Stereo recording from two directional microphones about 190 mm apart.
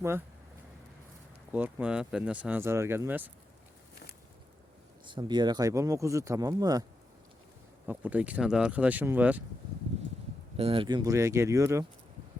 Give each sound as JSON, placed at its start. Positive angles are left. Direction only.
{"t": 1.5, "sound": "speech", "side_deg": -5}
{"t": 5.0, "sound": "speech", "side_deg": -25}
{"t": 7.9, "sound": "speech", "side_deg": -10}
{"t": 10.6, "sound": "speech", "side_deg": -30}